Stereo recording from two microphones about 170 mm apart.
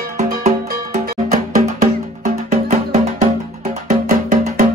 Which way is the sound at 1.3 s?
45° right (ahead or behind).